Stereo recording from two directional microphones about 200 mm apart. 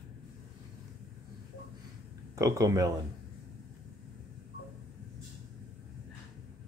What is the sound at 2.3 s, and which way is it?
Speech, 15° right (ahead or behind).